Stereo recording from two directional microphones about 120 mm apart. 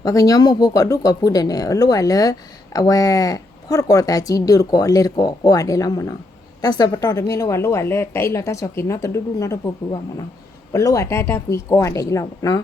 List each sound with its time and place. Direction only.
0.0 s speech: 30° left (ahead or behind)
10.7 s speech: 25° left (ahead or behind)